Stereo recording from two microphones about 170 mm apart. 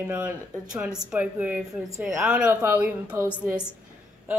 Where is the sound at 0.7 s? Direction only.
5° right (ahead or behind).